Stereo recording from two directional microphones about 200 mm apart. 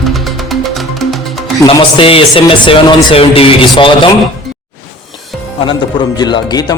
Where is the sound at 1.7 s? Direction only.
25° left (ahead or behind).